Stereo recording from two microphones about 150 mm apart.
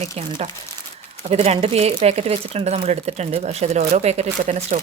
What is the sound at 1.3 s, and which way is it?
Speech, 45° right (ahead or behind).